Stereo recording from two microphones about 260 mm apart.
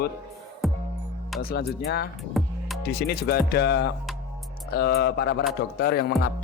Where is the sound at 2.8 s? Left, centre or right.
Left.